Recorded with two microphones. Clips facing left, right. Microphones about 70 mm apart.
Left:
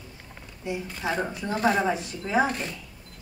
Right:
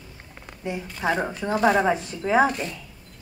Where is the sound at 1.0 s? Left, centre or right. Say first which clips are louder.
Right 4 dB; right.